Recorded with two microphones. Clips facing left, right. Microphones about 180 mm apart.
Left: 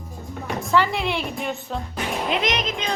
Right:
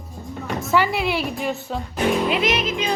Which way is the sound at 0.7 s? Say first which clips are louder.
Right 1 dB; 10° right (ahead or behind).